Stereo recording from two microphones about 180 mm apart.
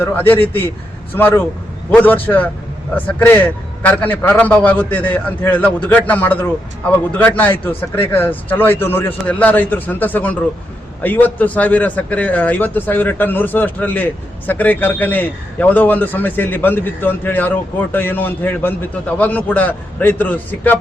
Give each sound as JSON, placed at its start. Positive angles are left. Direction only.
{"t": 0.0, "sound": "a man's voice", "side_deg": 10}